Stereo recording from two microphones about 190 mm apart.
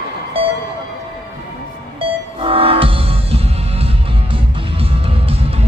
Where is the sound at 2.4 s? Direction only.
30° right (ahead or behind).